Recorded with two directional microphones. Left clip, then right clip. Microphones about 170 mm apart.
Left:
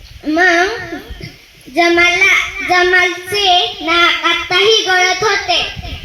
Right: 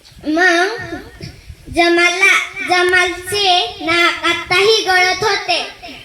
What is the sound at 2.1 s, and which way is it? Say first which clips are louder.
A child's voice: left 1 dB; 10° left (ahead or behind).